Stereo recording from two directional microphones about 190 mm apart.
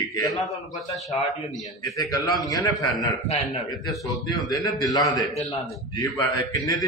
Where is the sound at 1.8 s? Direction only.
20° left (ahead or behind).